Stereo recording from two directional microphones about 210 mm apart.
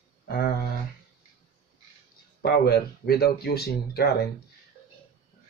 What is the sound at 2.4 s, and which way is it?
Speech, 50° left (ahead or behind).